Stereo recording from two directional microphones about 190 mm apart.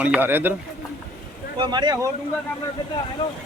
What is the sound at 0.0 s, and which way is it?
Speech, 10° right (ahead or behind).